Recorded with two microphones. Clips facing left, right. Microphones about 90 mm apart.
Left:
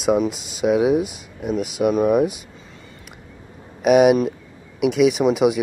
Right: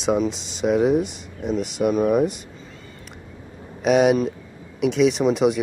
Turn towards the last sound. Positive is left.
turn(degrees=5)  # may be behind; listen again after turning